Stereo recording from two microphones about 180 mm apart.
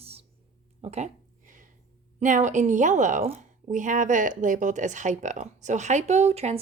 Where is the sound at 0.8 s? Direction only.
35° right (ahead or behind).